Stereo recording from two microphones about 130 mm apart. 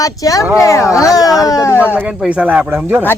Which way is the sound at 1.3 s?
30° left (ahead or behind).